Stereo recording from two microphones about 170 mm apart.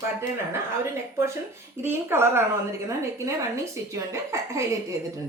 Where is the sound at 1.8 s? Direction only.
15° right (ahead or behind).